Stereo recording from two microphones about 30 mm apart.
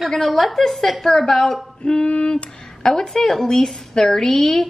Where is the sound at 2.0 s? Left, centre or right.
Left.